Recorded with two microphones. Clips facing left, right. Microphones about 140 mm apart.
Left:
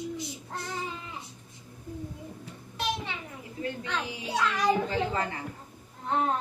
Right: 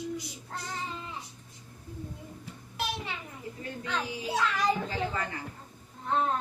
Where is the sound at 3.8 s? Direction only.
Centre (ahead or behind).